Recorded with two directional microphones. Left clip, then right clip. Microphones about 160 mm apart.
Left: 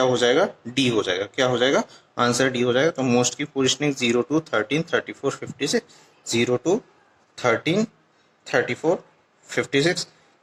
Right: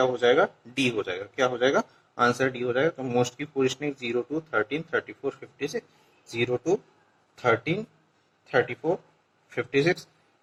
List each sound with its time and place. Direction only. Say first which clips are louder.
0.0 s speech: left 3 dB; 25° left (ahead or behind); by 6.5 s 40° left (ahead or behind)
7.4 s speech: left 4 dB; 30° left (ahead or behind)